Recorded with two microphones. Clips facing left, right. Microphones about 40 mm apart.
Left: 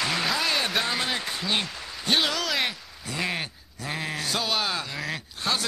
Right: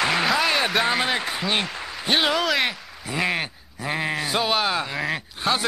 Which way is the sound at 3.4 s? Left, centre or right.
Right.